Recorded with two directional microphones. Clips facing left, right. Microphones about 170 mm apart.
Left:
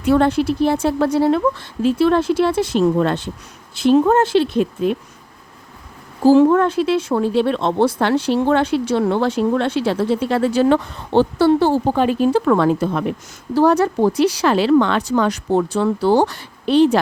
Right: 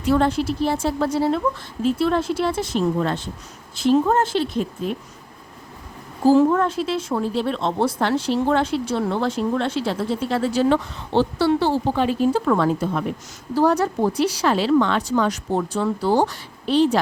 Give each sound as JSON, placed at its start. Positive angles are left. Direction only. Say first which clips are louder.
{"t": 0.0, "sound": "a woman's voice", "louder": "left 4 dB", "side_deg": 60}
{"t": 6.2, "sound": "speech", "louder": "left 4 dB", "side_deg": 75}
{"t": 12.2, "sound": "speech", "louder": "left 4 dB", "side_deg": 70}